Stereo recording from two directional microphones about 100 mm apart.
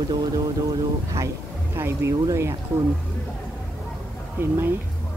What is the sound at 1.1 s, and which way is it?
Speech, 30° right (ahead or behind).